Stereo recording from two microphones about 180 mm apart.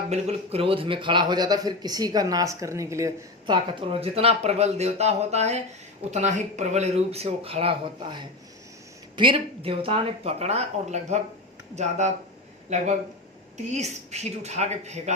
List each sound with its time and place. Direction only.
0.1 s a man's voice: 35° right (ahead or behind)
13.7 s speech: 40° right (ahead or behind)